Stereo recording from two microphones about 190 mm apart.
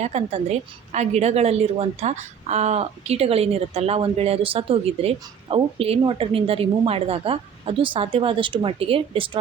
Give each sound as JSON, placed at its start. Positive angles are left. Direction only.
{"t": 0.0, "sound": "a woman's voice", "side_deg": -35}